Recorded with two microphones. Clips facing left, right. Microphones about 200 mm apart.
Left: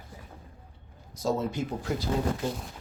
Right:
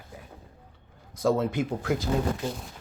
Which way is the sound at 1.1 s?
55° right (ahead or behind).